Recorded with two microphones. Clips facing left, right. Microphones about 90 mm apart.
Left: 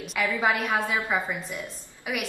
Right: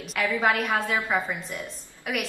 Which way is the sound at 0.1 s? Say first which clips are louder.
Right 1 dB; centre (ahead or behind).